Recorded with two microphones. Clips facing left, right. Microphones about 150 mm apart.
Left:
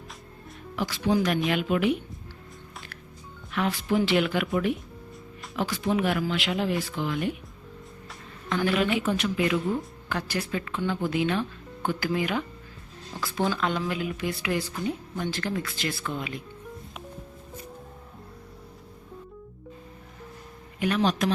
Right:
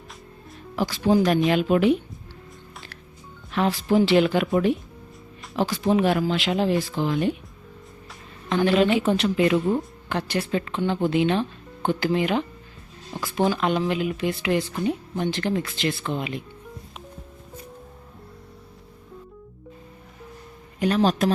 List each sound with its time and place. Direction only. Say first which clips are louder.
0.8 s speech: right 5 dB; 35° right (ahead or behind)
3.5 s a woman's voice: right 5 dB; 30° right (ahead or behind)
8.4 s a woman's voice: right 5 dB; 25° right (ahead or behind)
20.7 s speech: right 4 dB; 35° right (ahead or behind)